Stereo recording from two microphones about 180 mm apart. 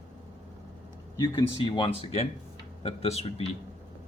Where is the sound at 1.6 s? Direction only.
25° left (ahead or behind).